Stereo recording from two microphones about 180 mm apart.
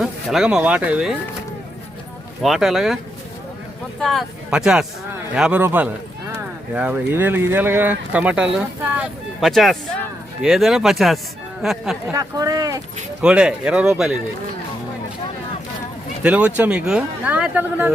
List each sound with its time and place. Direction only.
0.0 s speech: centre (ahead or behind)
2.4 s speech: centre (ahead or behind)
4.0 s speech: centre (ahead or behind)
12.1 s speech: 20° right (ahead or behind)
13.2 s speech: 5° right (ahead or behind)
16.2 s speech: 5° right (ahead or behind)